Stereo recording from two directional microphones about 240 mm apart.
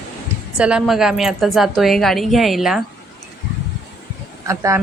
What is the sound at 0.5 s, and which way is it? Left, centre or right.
A woman's voice, centre.